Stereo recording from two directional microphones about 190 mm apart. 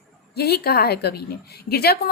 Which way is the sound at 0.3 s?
55° left (ahead or behind).